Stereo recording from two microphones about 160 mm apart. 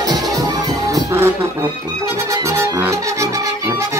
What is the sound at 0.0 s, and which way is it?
Music, 25° right (ahead or behind).